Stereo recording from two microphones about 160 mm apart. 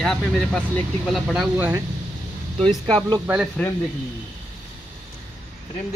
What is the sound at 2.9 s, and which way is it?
Speech, 25° right (ahead or behind).